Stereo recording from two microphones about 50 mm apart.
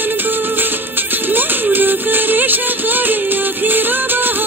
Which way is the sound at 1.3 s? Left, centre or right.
Right.